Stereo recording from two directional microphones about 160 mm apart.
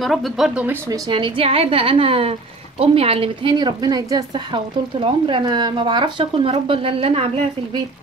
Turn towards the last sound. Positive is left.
turn(degrees=-35)  # may be behind; listen again after turning